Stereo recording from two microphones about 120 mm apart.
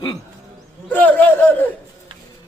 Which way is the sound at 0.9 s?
15° left (ahead or behind).